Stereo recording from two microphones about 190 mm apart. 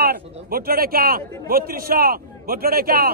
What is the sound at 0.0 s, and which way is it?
A man's voice, 55° right (ahead or behind).